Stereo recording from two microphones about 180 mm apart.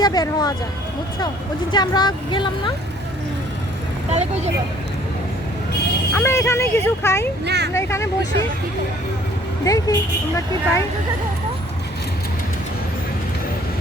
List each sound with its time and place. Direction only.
0.0 s speech: 20° left (ahead or behind)
1.7 s speech: 25° left (ahead or behind)
4.1 s speech: 40° right (ahead or behind)
6.1 s speech: 15° left (ahead or behind)
7.4 s speech: 70° right (ahead or behind)
7.7 s speech: 15° left (ahead or behind)
9.6 s speech: 20° left (ahead or behind)